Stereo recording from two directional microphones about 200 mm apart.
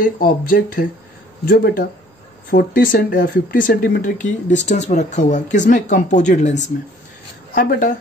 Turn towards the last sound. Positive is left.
turn(degrees=50)  # may be behind; listen again after turning